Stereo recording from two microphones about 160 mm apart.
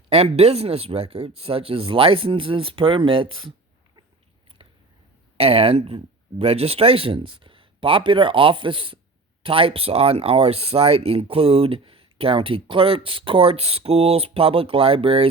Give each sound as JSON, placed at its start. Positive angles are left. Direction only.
{"t": 0.1, "sound": "speech", "side_deg": -40}
{"t": 5.4, "sound": "speech", "side_deg": -35}